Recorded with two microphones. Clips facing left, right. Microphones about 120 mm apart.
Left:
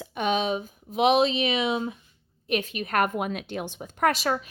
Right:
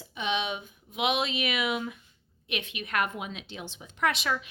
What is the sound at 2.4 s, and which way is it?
A woman's voice, 40° left (ahead or behind).